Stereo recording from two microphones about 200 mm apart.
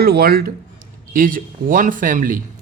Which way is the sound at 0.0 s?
50° right (ahead or behind).